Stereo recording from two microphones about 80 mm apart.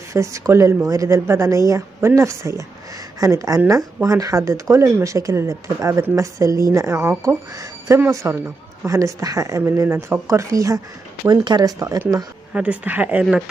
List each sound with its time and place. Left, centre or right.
0.1 s a woman's voice: right
8.2 s a woman's voice: right
8.8 s a woman's voice: right
9.8 s a woman's voice: right
11.4 s speech: right
12.5 s speech: centre